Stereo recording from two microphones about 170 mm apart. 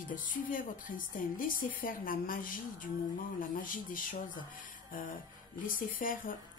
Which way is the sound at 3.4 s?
55° left (ahead or behind).